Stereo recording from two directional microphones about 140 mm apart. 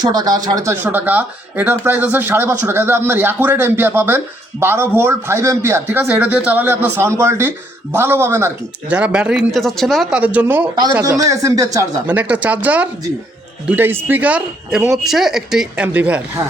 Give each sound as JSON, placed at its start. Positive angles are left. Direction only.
{"t": 0.0, "sound": "speech", "side_deg": -30}
{"t": 11.0, "sound": "speech", "side_deg": -25}
{"t": 12.0, "sound": "speech", "side_deg": -10}